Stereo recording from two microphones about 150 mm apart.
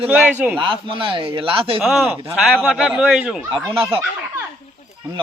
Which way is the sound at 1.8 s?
Centre (ahead or behind).